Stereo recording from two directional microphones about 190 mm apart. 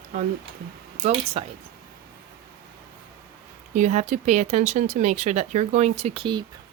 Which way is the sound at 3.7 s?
40° right (ahead or behind).